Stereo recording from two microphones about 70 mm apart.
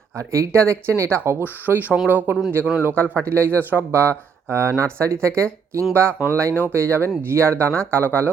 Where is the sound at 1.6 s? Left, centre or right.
Right.